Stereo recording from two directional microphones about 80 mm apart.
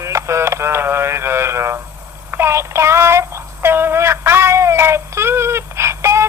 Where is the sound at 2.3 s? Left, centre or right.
Right.